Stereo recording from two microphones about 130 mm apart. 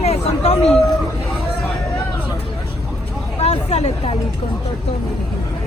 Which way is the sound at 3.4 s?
50° left (ahead or behind).